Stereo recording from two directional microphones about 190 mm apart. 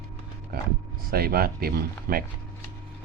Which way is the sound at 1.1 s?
50° right (ahead or behind).